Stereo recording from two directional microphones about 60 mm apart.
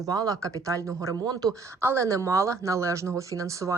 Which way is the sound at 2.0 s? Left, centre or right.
Right.